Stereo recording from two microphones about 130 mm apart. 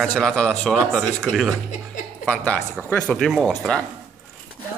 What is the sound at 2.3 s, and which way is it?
Speech, 10° left (ahead or behind).